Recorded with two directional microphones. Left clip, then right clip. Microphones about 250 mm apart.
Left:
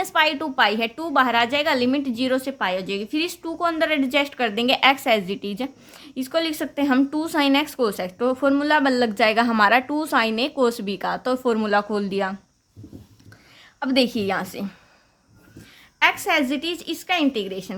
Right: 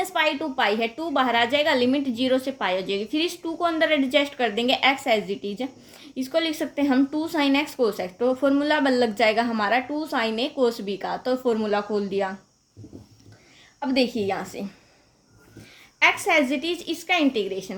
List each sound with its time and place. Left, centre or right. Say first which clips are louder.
0.0 s a woman's voice: left 3 dB; left
13.7 s a woman's voice: left 2 dB; left
16.0 s a woman's voice: even; centre